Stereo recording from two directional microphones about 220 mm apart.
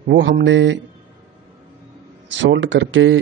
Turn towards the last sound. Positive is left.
turn(degrees=-60)  # may be behind; listen again after turning